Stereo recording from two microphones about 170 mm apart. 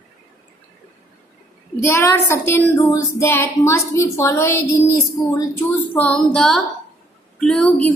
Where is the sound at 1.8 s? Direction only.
15° left (ahead or behind).